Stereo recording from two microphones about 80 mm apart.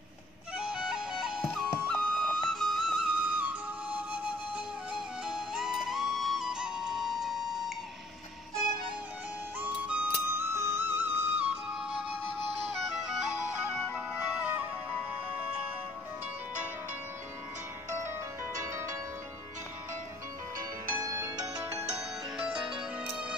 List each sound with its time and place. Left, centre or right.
0.6 s music: centre
1.6 s music: centre
3.1 s flute: centre
4.9 s music: centre
9.6 s music: centre
10.2 s music: right
13.9 s music: centre
18.0 s music: right
20.5 s music: right
22.4 s music: centre